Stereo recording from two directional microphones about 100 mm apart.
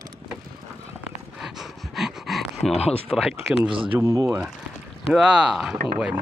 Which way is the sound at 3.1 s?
5° right (ahead or behind).